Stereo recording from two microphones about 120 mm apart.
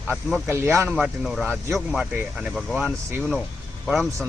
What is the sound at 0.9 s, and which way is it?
Speech, 5° right (ahead or behind).